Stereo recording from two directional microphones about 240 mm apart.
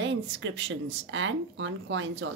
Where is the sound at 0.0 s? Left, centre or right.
Right.